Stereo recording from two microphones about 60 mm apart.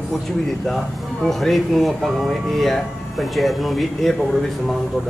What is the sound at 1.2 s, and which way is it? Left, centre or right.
Speech, centre.